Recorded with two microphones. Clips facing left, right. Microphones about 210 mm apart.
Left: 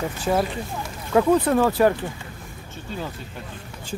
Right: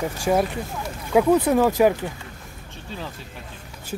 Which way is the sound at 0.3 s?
10° right (ahead or behind).